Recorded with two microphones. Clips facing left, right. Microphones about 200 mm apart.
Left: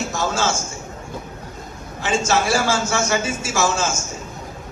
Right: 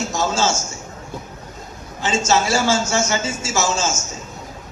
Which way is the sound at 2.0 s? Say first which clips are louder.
Right 1 dB; 60° left (ahead or behind).